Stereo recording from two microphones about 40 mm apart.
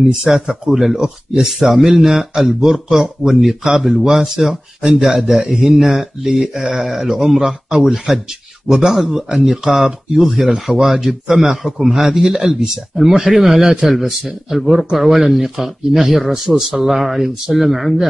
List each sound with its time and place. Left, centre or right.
0.0 s speech: centre
5.2 s a man's voice: right
5.6 s speech: centre